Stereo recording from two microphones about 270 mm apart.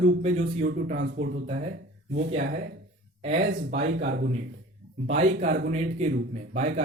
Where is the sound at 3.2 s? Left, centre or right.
Right.